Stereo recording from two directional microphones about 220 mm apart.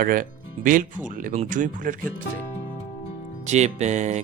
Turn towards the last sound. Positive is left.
turn(degrees=-30)  # may be behind; listen again after turning